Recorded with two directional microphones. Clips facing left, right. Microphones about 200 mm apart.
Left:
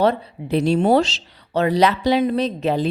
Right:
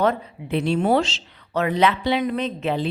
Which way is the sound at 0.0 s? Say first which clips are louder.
Left 3 dB; 35° left (ahead or behind).